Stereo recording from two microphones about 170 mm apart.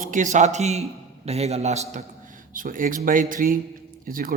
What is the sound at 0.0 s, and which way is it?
A man's voice, 50° right (ahead or behind).